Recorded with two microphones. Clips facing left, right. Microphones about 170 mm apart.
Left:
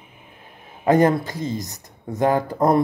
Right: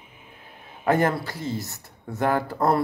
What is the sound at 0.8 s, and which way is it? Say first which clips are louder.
Speech: left 5 dB; 20° left (ahead or behind).